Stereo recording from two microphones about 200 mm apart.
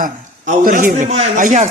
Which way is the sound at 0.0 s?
45° right (ahead or behind).